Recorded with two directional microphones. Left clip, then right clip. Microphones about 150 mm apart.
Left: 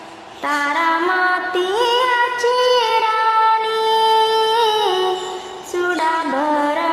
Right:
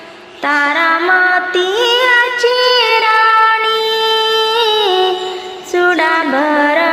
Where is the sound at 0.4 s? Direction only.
20° right (ahead or behind).